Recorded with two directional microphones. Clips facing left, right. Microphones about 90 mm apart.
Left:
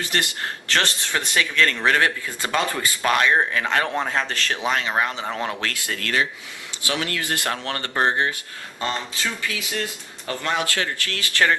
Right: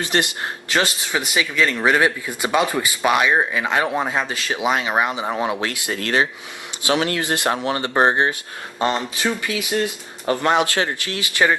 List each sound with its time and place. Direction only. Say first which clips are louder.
0.0 s speech: right 4 dB; 20° right (ahead or behind)
10.3 s speech: right 8 dB; 30° right (ahead or behind)
10.6 s speech: right 5 dB; 20° right (ahead or behind)